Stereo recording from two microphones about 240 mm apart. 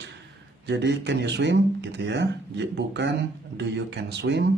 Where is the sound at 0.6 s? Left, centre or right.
Right.